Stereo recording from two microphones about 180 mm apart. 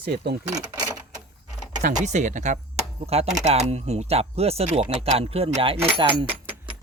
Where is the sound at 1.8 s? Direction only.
40° right (ahead or behind).